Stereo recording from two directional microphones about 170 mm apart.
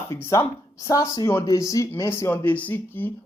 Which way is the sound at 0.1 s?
15° left (ahead or behind).